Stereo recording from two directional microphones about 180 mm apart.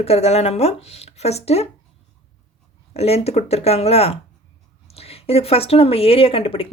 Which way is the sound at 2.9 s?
35° left (ahead or behind).